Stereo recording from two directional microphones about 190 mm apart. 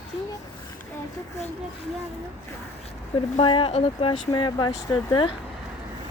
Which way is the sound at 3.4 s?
25° left (ahead or behind).